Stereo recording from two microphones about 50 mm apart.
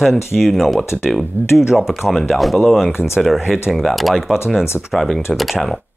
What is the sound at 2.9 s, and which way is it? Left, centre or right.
Speech, left.